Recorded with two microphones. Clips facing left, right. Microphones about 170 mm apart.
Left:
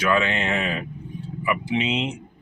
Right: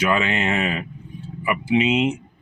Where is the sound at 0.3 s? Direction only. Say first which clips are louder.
Right 2 dB; 15° right (ahead or behind).